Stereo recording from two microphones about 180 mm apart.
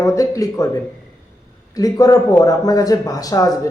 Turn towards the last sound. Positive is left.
turn(degrees=20)  # may be behind; listen again after turning